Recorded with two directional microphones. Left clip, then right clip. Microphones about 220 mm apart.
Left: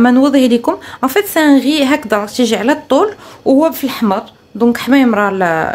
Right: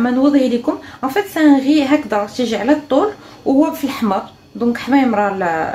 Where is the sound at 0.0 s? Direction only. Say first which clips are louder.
Left 4 dB; 50° left (ahead or behind).